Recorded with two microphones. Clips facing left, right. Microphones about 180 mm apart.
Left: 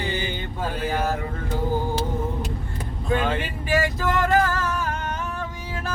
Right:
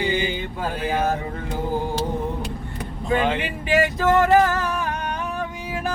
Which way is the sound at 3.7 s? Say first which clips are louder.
Right 4 dB; 20° right (ahead or behind).